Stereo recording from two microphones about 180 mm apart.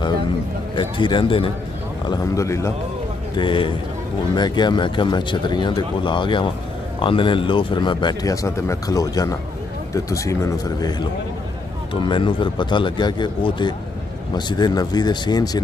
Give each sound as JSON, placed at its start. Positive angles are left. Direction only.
{"t": 0.7, "sound": "speech", "side_deg": 25}
{"t": 2.0, "sound": "speech", "side_deg": 15}
{"t": 3.3, "sound": "speech", "side_deg": 30}